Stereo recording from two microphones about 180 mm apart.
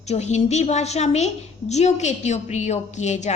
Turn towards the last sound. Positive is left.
turn(degrees=40)  # may be behind; listen again after turning